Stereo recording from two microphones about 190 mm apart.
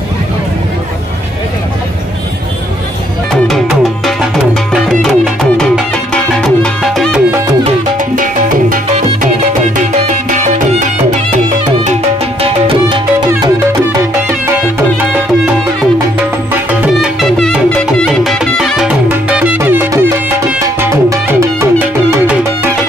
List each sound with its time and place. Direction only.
3.4 s music: centre (ahead or behind)
8.2 s music: 45° right (ahead or behind)
12.4 s music: 30° right (ahead or behind)
16.8 s music: centre (ahead or behind)